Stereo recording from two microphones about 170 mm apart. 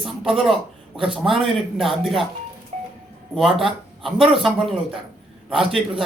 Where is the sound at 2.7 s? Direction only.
40° right (ahead or behind).